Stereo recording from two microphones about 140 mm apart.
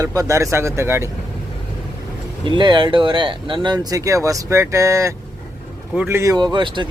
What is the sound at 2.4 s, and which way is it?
Speech, 35° right (ahead or behind).